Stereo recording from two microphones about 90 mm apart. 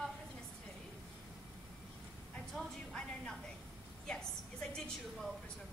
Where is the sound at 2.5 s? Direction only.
5° left (ahead or behind).